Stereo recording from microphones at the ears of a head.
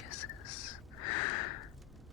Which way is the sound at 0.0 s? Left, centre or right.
Left.